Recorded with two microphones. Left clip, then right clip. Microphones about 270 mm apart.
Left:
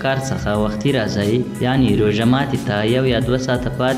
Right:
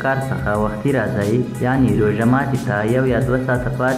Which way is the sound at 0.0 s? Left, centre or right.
Left.